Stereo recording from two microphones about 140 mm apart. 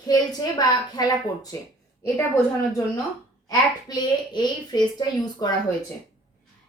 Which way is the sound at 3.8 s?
30° left (ahead or behind).